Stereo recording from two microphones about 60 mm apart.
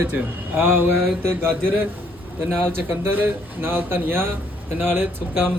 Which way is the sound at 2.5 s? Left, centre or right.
Right.